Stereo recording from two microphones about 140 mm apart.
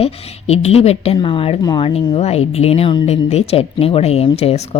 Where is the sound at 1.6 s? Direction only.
25° left (ahead or behind).